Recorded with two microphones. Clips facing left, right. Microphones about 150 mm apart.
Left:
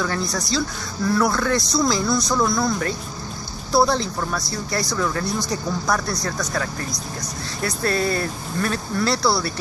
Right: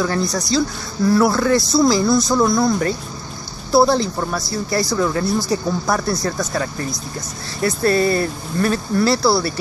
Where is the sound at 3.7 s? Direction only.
5° right (ahead or behind).